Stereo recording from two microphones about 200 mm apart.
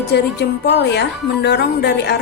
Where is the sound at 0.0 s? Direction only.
55° left (ahead or behind).